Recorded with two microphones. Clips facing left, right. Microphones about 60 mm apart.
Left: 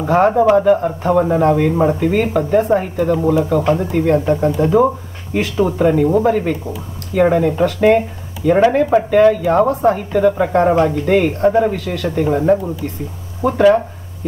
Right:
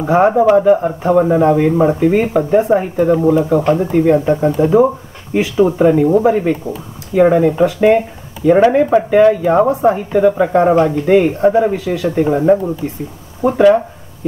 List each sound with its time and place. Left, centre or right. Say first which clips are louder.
0.0 s speech: right 2 dB; centre
0.3 s speech: right 2 dB; centre